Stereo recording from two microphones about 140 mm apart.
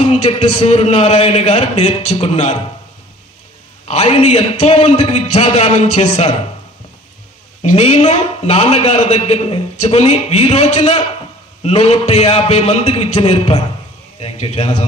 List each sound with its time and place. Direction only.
0.0 s a man's voice: 50° left (ahead or behind)
3.8 s a man's voice: 50° left (ahead or behind)
7.6 s a man's voice: 50° left (ahead or behind)